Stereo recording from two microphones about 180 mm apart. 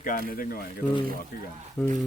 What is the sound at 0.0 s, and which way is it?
Speech, 50° left (ahead or behind).